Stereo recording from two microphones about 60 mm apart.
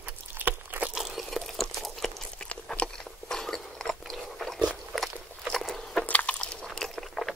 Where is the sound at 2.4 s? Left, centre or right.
Centre.